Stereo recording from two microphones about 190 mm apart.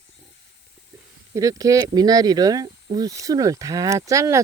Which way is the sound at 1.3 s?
15° right (ahead or behind).